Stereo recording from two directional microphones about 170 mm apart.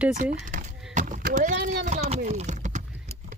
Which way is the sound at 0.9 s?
50° right (ahead or behind).